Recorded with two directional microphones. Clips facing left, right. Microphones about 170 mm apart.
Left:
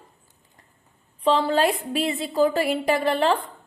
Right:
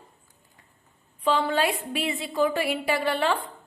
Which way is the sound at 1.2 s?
35° left (ahead or behind).